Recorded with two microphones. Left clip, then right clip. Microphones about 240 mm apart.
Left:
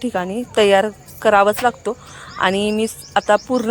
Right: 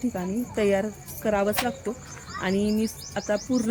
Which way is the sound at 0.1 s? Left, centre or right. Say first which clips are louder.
Left 10 dB; left.